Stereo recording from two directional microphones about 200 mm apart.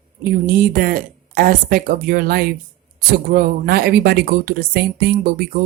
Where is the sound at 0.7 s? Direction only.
45° right (ahead or behind).